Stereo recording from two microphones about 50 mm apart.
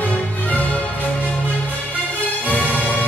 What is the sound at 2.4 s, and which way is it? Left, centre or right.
Music, left.